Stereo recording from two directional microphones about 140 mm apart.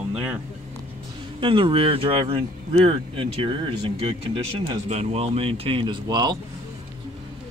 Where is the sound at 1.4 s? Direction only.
35° right (ahead or behind).